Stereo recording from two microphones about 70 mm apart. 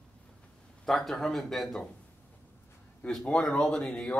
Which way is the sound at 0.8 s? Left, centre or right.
Centre.